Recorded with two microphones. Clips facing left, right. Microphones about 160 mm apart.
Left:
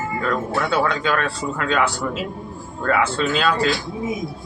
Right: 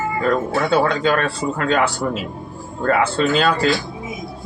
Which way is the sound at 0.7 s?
30° right (ahead or behind).